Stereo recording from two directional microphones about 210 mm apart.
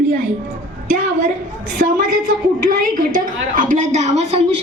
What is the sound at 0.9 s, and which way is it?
A woman's voice, 35° right (ahead or behind).